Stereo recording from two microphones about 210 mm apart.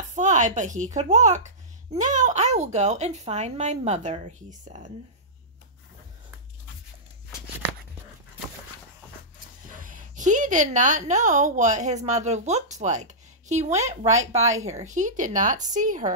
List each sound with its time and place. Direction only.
0.1 s speech: 35° right (ahead or behind)
9.7 s a woman's voice: 40° right (ahead or behind)